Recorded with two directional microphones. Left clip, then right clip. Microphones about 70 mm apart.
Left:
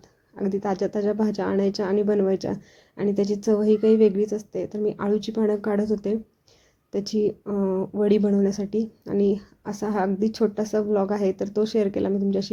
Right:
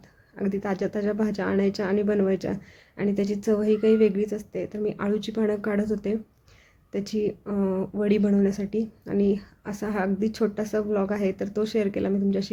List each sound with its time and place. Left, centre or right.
0.3 s speech: left
7.4 s speech: centre
8.2 s speech: left